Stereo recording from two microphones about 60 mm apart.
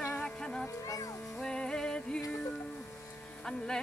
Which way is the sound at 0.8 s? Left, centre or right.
Left.